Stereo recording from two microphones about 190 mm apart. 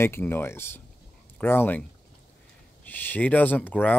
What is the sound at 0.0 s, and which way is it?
Speech, 15° left (ahead or behind).